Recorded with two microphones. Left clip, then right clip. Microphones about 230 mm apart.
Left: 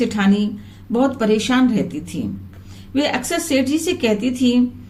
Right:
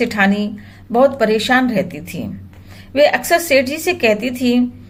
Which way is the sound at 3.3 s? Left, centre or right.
Right.